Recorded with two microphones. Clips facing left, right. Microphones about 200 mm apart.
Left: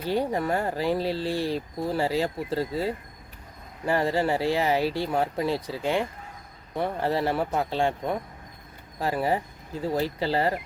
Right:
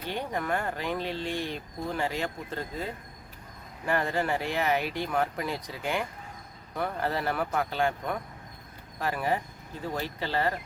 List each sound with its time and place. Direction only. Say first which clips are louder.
0.1 s speech: left 6 dB; 35° left (ahead or behind)